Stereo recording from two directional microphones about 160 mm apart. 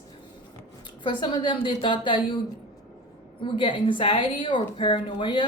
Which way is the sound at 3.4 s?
30° left (ahead or behind).